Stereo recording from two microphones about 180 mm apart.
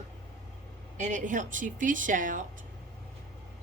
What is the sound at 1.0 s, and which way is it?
Speech, 45° right (ahead or behind).